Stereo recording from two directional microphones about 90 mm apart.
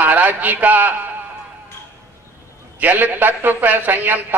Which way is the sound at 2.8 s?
20° right (ahead or behind).